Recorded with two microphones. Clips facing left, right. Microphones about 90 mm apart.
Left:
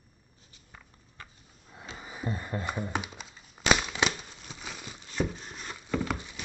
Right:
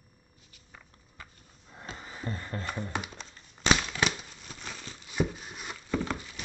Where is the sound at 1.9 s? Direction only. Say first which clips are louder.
Left 3 dB; 10° left (ahead or behind).